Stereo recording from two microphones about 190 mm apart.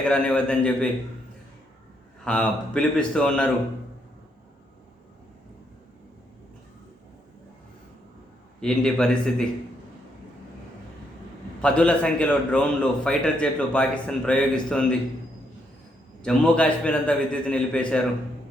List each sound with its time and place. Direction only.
0.1 s a man's voice: 5° left (ahead or behind)
2.2 s a man's voice: 5° left (ahead or behind)
8.6 s a man's voice: 5° left (ahead or behind)
11.6 s a man's voice: 5° left (ahead or behind)
16.2 s a man's voice: 5° left (ahead or behind)